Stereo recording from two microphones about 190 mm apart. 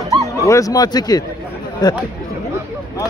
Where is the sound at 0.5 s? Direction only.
15° left (ahead or behind).